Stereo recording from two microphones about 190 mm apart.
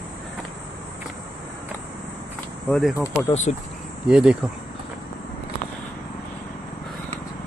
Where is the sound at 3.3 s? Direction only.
35° left (ahead or behind).